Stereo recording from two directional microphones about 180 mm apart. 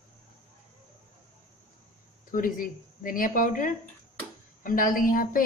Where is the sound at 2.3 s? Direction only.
50° left (ahead or behind).